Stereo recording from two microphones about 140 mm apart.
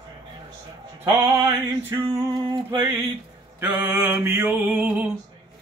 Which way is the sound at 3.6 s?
15° right (ahead or behind).